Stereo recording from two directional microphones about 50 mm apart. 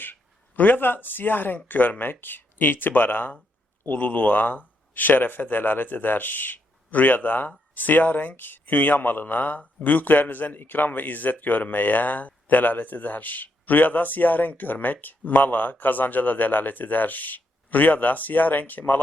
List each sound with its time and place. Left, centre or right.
0.0 s a man's voice: left